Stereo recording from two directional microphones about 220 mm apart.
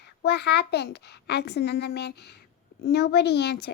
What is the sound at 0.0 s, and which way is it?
A woman's voice, 50° left (ahead or behind).